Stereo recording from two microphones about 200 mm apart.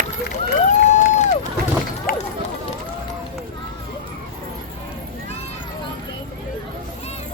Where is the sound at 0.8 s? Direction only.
35° left (ahead or behind).